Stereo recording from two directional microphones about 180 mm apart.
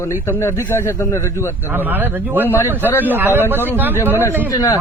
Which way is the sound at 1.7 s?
10° right (ahead or behind).